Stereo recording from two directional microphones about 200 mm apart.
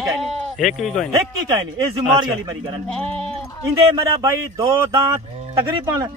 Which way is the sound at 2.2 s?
20° right (ahead or behind).